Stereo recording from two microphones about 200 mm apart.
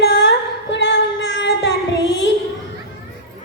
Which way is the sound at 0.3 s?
65° left (ahead or behind).